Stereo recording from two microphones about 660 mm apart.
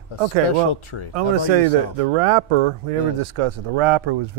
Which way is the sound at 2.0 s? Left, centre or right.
Right.